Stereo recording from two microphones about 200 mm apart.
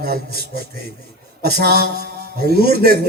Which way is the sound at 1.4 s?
50° right (ahead or behind).